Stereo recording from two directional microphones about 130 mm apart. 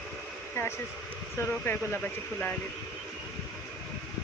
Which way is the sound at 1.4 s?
20° left (ahead or behind).